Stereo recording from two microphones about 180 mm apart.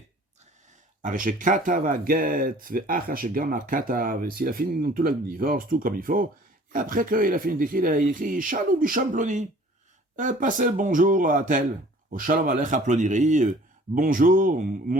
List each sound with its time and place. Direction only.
1.0 s speech: 50° right (ahead or behind)